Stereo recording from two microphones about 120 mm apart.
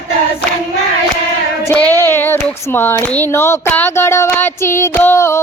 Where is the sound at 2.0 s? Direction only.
20° left (ahead or behind).